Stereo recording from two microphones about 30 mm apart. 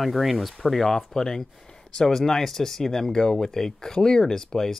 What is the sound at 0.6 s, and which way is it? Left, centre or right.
Speech, centre.